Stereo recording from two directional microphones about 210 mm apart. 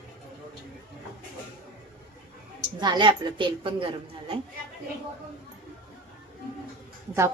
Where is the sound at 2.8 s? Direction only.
20° right (ahead or behind).